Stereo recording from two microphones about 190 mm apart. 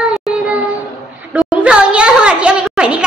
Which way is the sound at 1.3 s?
5° right (ahead or behind).